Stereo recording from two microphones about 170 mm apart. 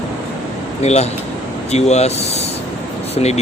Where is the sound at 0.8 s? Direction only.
40° left (ahead or behind).